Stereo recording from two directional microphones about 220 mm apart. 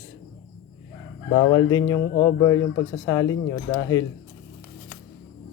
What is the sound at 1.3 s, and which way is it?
Speech, 20° left (ahead or behind).